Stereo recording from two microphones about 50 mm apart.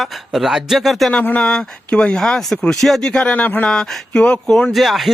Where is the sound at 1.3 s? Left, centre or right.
Centre.